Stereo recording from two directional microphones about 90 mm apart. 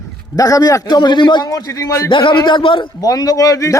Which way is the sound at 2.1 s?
70° left (ahead or behind).